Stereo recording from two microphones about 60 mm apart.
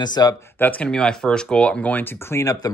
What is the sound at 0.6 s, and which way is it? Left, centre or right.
Speech, left.